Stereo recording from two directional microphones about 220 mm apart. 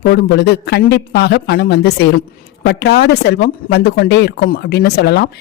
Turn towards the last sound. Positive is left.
turn(degrees=50)  # may be behind; listen again after turning